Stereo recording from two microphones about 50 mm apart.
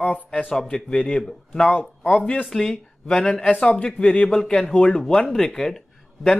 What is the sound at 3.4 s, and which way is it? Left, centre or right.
Speech, centre.